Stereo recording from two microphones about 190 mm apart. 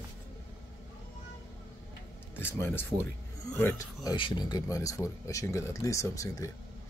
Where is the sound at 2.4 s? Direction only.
10° left (ahead or behind).